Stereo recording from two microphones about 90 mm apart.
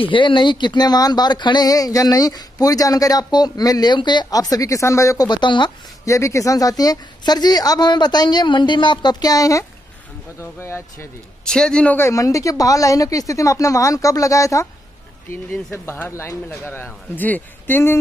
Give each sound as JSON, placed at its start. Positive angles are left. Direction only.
{"t": 0.0, "sound": "speech", "side_deg": 65}
{"t": 5.3, "sound": "speech", "side_deg": 60}
{"t": 6.0, "sound": "speech", "side_deg": 35}
{"t": 10.4, "sound": "a man's voice", "side_deg": 30}
{"t": 11.4, "sound": "a man's voice", "side_deg": 10}
{"t": 12.0, "sound": "speech", "side_deg": 35}
{"t": 15.7, "sound": "a man's voice", "side_deg": 30}